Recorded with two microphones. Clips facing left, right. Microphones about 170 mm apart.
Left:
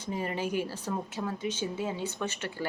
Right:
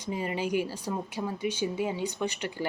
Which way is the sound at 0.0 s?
15° right (ahead or behind).